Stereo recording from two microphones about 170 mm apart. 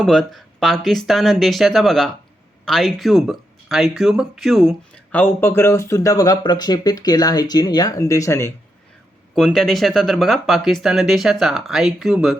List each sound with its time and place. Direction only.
0.0 s speech: centre (ahead or behind)
5.1 s speech: 10° left (ahead or behind)
9.3 s speech: centre (ahead or behind)